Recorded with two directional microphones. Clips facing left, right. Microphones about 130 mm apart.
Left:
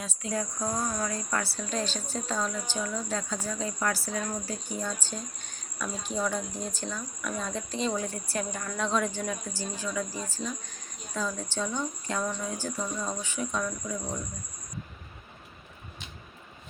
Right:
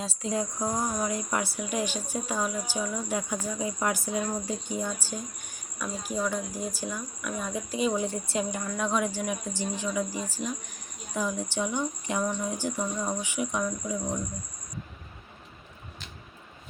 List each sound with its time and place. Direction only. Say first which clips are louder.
0.0 s speech: right 3 dB; 30° right (ahead or behind); by 8.0 s 10° right (ahead or behind)
8.0 s speech: right 3 dB; 25° right (ahead or behind)